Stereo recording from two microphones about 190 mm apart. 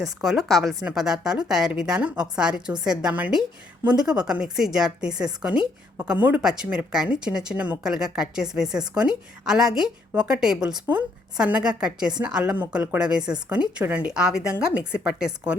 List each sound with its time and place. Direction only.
0.0 s speech: centre (ahead or behind)